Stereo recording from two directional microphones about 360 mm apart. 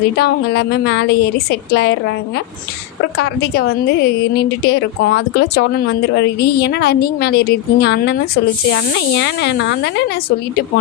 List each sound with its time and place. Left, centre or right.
0.2 s a woman's voice: left